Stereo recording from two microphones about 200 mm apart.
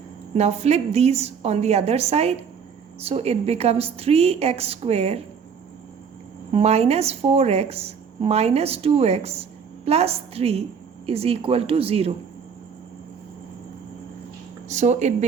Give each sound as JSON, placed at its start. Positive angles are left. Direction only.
{"t": 0.3, "sound": "a woman's voice", "side_deg": -35}
{"t": 6.5, "sound": "a woman's voice", "side_deg": -30}
{"t": 14.7, "sound": "speech", "side_deg": -35}